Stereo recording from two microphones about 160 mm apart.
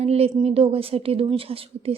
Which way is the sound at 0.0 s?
40° right (ahead or behind).